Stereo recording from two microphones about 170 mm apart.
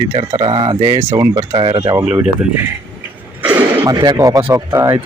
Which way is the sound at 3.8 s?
25° right (ahead or behind).